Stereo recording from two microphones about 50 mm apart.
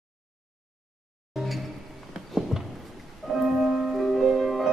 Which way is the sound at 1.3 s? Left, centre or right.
Centre.